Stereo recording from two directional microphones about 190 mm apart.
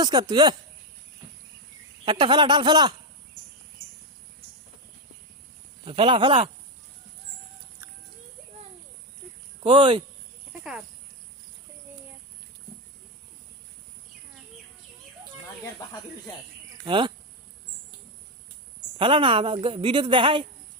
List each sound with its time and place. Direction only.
0.0 s a woman's voice: 20° right (ahead or behind)
2.0 s a woman's voice: 25° right (ahead or behind)
5.8 s a woman's voice: 25° right (ahead or behind)
9.6 s a woman's voice: 25° right (ahead or behind)
10.6 s speech: 5° right (ahead or behind)
16.8 s speech: 25° right (ahead or behind)
18.9 s a woman's voice: 25° right (ahead or behind)